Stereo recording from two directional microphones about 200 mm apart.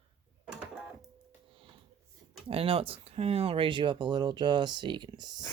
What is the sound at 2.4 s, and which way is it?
Speech, 30° right (ahead or behind).